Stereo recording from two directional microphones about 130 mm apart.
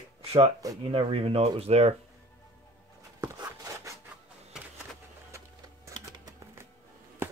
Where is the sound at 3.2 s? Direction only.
25° right (ahead or behind).